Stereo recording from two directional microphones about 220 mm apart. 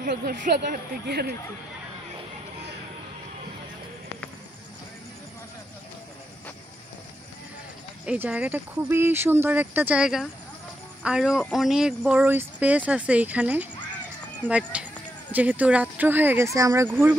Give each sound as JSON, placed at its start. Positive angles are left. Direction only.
{"t": 0.0, "sound": "speech", "side_deg": -45}
{"t": 8.0, "sound": "speech", "side_deg": -5}